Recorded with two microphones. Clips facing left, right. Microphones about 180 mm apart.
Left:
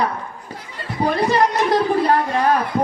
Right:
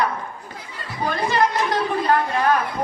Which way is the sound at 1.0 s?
35° left (ahead or behind).